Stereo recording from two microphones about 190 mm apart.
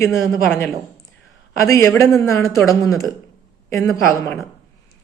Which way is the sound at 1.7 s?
15° left (ahead or behind).